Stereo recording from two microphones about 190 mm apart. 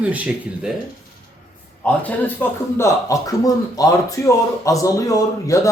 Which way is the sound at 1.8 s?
10° left (ahead or behind).